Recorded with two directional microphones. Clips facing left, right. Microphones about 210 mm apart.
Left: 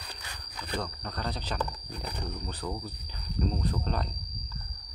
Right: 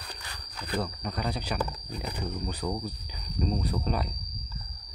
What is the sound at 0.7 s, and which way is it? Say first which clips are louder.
Speech: right 4 dB; 10° right (ahead or behind).